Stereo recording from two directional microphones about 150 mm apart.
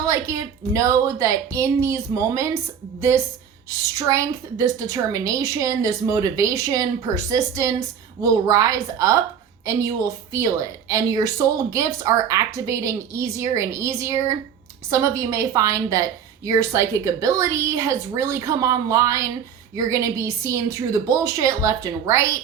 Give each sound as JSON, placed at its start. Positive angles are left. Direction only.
{"t": 0.0, "sound": "a woman's voice", "side_deg": -20}